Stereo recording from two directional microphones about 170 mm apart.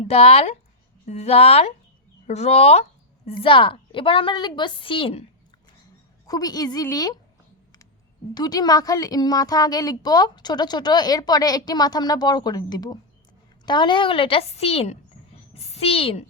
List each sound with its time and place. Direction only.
0.0 s a woman's voice: 35° left (ahead or behind)
6.2 s a woman's voice: 20° left (ahead or behind)
8.3 s a woman's voice: 25° left (ahead or behind)